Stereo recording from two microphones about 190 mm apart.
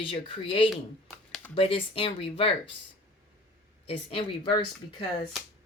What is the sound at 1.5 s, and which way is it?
Speech, 30° left (ahead or behind).